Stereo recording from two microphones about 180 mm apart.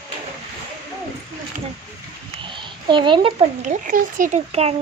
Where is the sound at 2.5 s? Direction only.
25° right (ahead or behind).